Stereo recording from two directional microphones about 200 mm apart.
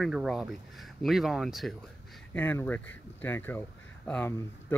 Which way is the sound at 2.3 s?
10° left (ahead or behind).